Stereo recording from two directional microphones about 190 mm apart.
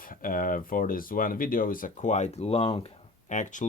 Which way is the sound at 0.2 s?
45° left (ahead or behind).